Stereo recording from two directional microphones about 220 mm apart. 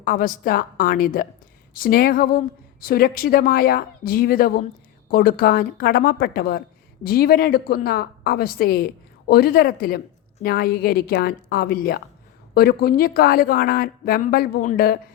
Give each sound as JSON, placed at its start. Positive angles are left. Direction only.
{"t": 0.0, "sound": "a woman's voice", "side_deg": 40}